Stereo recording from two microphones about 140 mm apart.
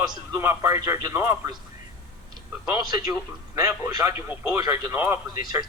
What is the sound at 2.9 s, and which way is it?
Speech, 25° right (ahead or behind).